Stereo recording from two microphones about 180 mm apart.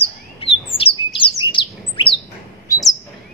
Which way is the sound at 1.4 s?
25° left (ahead or behind).